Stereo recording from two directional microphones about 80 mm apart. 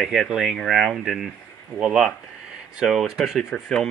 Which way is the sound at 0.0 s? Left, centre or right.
Centre.